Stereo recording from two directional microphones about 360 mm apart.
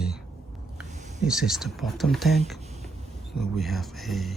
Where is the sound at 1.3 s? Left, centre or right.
Centre.